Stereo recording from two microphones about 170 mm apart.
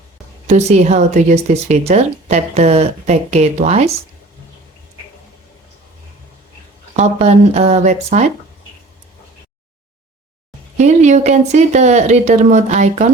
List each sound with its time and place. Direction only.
0.4 s speech: 45° right (ahead or behind)
6.9 s speech: 40° right (ahead or behind)
10.8 s speech: 45° right (ahead or behind)